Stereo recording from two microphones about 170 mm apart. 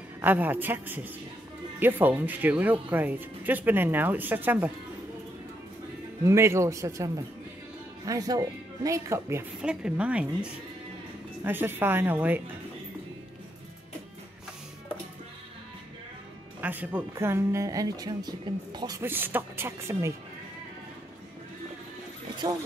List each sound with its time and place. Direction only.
0.2 s a woman's voice: 10° right (ahead or behind)
6.2 s a woman's voice: 15° right (ahead or behind)
9.6 s a woman's voice: 5° right (ahead or behind)
16.6 s a woman's voice: 10° right (ahead or behind)
22.4 s speech: 20° right (ahead or behind)